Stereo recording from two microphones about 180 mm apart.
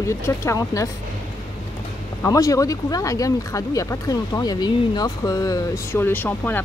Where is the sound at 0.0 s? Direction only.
15° left (ahead or behind).